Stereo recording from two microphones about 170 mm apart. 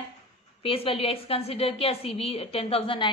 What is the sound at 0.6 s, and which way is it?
A woman's voice, 35° left (ahead or behind).